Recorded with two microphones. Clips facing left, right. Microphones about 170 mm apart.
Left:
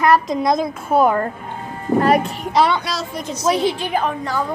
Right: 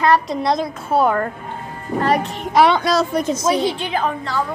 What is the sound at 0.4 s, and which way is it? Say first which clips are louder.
Speech: left 1 dB; 10° left (ahead or behind).